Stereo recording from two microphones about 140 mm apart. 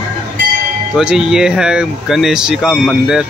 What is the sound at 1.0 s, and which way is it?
Speech, 5° right (ahead or behind).